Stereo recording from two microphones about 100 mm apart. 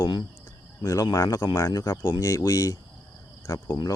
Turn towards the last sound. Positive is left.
turn(degrees=30)  # may be behind; listen again after turning